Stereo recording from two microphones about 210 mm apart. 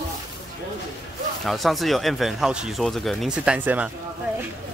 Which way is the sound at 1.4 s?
Centre (ahead or behind).